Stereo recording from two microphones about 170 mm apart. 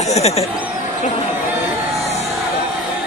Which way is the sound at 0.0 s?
40° left (ahead or behind).